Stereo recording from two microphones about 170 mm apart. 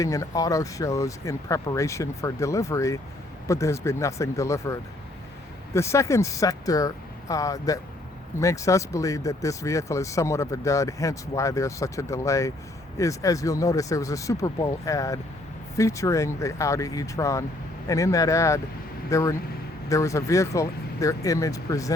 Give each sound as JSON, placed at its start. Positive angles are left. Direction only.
{"t": 0.0, "sound": "speech", "side_deg": 20}